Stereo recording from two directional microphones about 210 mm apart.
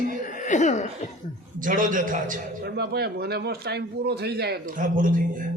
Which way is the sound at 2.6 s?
50° right (ahead or behind).